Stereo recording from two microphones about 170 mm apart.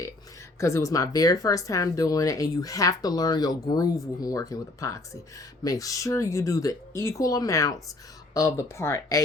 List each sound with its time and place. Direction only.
0.6 s speech: 15° left (ahead or behind)